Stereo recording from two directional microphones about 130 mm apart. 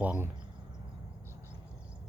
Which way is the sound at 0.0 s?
10° right (ahead or behind).